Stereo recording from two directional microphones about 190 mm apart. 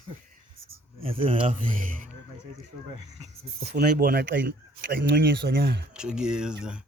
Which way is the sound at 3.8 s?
55° right (ahead or behind).